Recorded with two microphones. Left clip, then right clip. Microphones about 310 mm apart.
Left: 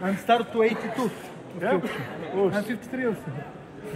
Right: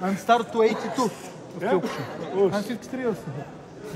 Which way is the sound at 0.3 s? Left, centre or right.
Right.